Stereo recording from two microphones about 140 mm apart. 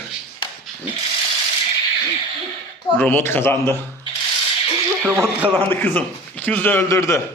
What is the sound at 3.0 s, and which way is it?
Speech, 10° left (ahead or behind).